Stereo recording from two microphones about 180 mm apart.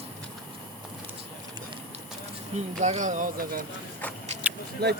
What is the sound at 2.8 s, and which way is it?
Speech, 40° right (ahead or behind).